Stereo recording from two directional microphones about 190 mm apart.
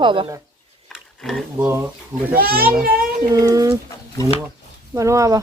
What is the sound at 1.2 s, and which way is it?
Speech, centre (ahead or behind).